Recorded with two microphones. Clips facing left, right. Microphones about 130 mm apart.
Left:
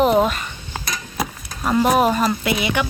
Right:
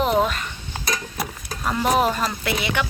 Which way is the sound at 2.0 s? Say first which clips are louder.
Left 4 dB; 10° left (ahead or behind).